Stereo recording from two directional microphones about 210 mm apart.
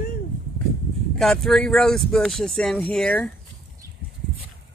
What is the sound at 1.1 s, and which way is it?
Speech, centre (ahead or behind).